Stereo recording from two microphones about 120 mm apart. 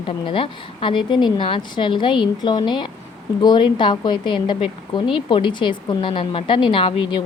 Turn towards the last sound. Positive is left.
turn(degrees=45)  # may be behind; listen again after turning